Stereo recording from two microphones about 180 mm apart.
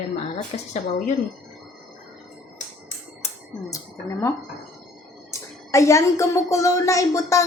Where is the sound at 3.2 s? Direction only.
35° left (ahead or behind).